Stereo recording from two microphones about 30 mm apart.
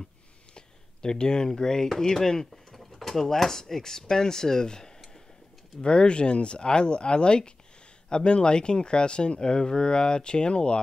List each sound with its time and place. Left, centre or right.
0.6 s speech: left
2.5 s speech: centre; by 10.8 s left